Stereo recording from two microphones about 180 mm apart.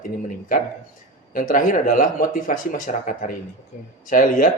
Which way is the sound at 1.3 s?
50° left (ahead or behind).